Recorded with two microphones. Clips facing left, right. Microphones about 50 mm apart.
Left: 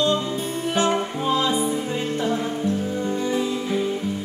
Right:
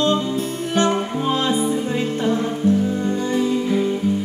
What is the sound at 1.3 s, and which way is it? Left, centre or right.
Music, centre.